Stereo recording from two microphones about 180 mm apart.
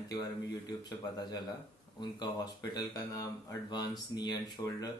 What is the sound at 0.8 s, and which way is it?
Speech, 20° left (ahead or behind).